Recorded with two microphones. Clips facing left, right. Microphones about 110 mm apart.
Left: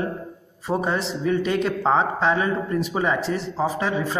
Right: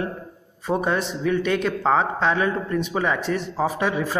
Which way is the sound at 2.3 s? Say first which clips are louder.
Even; 20° left (ahead or behind).